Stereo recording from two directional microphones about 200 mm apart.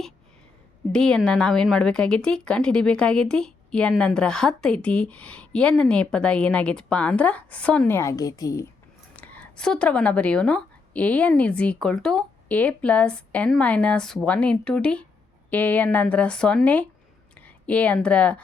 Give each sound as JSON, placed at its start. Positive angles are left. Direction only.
{"t": 0.9, "sound": "speech", "side_deg": 5}
{"t": 9.1, "sound": "a woman's voice", "side_deg": 5}